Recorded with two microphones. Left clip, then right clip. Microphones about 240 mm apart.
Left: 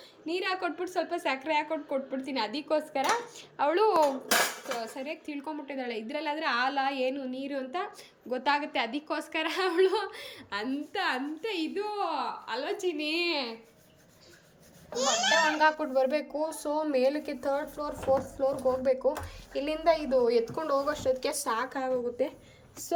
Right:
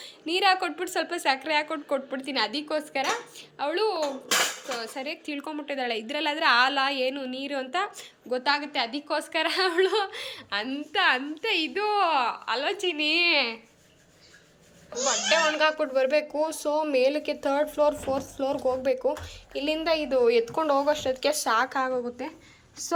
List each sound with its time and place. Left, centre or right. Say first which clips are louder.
0.3 s a woman's voice: right 8 dB; centre
15.5 s a woman's voice: right 2 dB; centre
17.4 s speech: right 9 dB; centre
18.8 s a woman's voice: right 1 dB; centre
20.1 s speech: right 4 dB; centre
20.9 s a woman's voice: right 4 dB; centre